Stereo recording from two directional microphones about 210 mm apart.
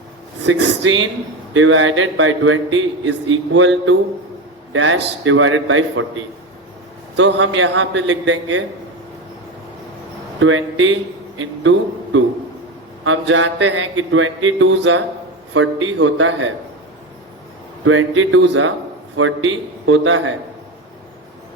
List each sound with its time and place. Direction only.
0.4 s a man's voice: 65° right (ahead or behind)
7.2 s a man's voice: 60° right (ahead or behind)
10.4 s a man's voice: 65° right (ahead or behind)
17.8 s a man's voice: 70° right (ahead or behind)